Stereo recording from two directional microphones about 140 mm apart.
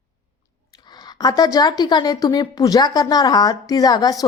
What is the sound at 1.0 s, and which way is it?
A woman's voice, 30° left (ahead or behind).